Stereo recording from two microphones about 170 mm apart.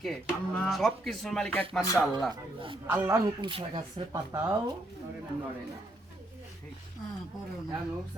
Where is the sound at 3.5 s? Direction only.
30° right (ahead or behind).